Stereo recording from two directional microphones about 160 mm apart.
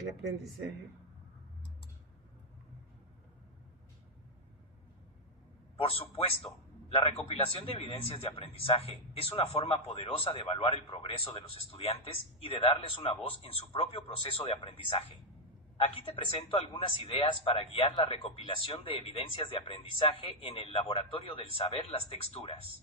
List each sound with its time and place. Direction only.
5.7 s a man's voice: 40° left (ahead or behind)
15.8 s speech: 35° left (ahead or behind)